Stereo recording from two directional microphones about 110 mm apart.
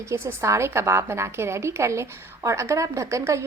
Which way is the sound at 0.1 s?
25° right (ahead or behind).